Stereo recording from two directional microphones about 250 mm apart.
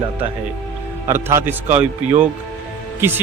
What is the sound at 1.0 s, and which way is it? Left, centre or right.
Speech, centre.